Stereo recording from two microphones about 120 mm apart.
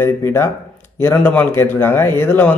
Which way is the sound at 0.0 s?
20° left (ahead or behind).